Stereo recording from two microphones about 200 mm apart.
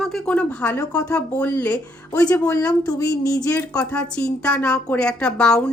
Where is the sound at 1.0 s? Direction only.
5° left (ahead or behind).